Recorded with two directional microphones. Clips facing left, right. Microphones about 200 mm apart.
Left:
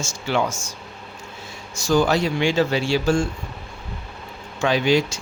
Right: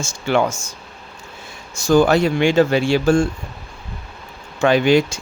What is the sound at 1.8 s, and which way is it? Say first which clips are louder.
Speech: right 5 dB; 50° right (ahead or behind).